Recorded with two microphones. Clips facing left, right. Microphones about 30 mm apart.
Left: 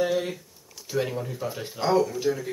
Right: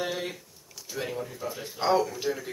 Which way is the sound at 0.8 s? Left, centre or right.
Centre.